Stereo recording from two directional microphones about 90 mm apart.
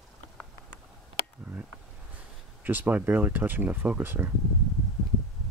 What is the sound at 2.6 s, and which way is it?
Speech, 20° right (ahead or behind).